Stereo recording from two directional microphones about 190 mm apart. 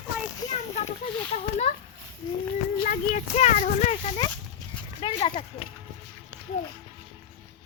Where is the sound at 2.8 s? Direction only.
40° left (ahead or behind).